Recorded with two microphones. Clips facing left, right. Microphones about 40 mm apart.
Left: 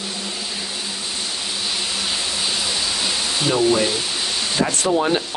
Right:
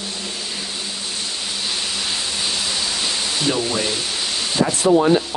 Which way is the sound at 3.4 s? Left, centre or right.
Centre.